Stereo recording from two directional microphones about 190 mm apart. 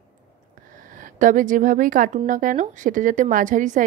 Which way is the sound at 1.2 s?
45° right (ahead or behind).